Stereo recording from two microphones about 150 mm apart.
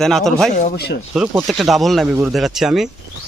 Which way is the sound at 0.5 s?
75° left (ahead or behind).